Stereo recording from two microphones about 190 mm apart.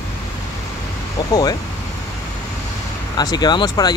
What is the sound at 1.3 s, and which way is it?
Speech, 20° left (ahead or behind).